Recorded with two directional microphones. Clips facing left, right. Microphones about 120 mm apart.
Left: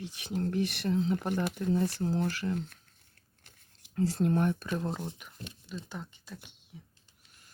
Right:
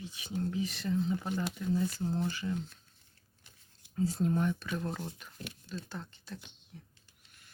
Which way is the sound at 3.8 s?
75° left (ahead or behind).